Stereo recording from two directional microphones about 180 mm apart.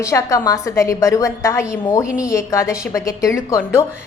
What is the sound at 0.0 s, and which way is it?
A woman's voice, 15° left (ahead or behind).